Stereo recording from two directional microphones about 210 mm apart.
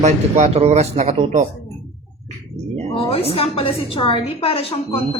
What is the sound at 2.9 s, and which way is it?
A woman's voice, 25° left (ahead or behind).